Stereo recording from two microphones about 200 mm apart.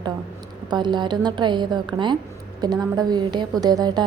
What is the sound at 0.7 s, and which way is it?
A woman's voice, 20° right (ahead or behind).